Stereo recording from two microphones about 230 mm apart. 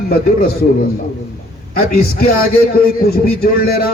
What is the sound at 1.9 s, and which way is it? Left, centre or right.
A man's voice, left.